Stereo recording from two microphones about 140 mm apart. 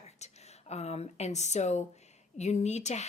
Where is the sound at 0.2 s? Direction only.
55° left (ahead or behind).